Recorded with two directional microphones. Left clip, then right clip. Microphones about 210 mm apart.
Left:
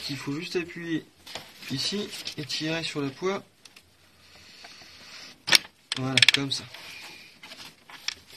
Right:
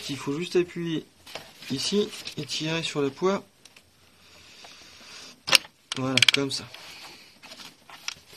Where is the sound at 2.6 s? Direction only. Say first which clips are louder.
Right 4 dB; 55° right (ahead or behind).